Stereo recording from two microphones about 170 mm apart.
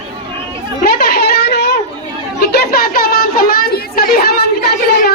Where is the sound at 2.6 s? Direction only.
65° left (ahead or behind).